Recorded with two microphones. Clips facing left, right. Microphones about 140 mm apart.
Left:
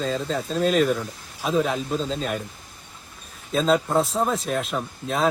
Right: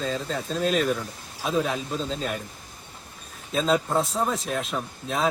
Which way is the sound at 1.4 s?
Centre (ahead or behind).